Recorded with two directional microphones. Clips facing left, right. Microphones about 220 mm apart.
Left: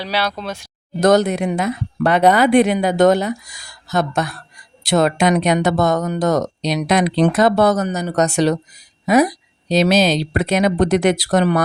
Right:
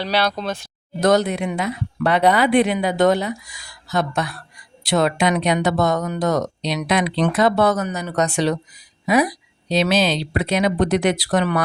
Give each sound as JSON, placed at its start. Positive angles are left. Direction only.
{"t": 0.0, "sound": "speech", "side_deg": 5}
{"t": 1.0, "sound": "speech", "side_deg": 45}